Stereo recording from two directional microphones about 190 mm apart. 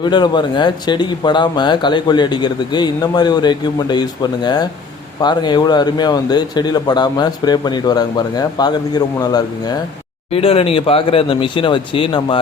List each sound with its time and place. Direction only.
0.0 s speech: 25° left (ahead or behind)
10.3 s speech: 30° left (ahead or behind)